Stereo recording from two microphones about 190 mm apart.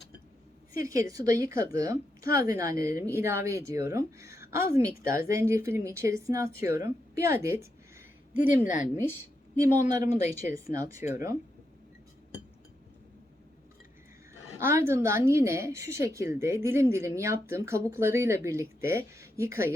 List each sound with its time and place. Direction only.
0.7 s a woman's voice: 15° right (ahead or behind)
8.6 s speech: 40° left (ahead or behind)
9.9 s a woman's voice: 20° right (ahead or behind)
14.6 s a woman's voice: 15° right (ahead or behind)